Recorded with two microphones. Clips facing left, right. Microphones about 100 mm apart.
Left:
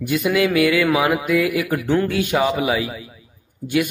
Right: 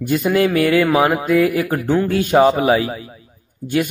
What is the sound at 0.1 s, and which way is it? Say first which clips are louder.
A man's voice: right 2 dB; 40° right (ahead or behind).